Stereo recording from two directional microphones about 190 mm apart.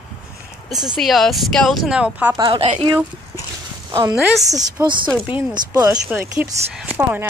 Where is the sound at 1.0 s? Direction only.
Centre (ahead or behind).